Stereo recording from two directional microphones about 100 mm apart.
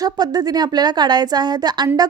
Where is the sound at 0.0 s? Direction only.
40° right (ahead or behind).